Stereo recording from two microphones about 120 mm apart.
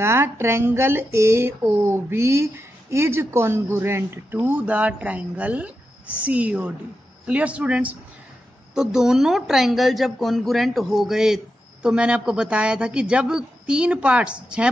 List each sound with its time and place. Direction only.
0.0 s speech: 20° right (ahead or behind)